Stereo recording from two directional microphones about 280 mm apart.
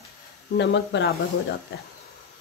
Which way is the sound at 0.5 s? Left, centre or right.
Left.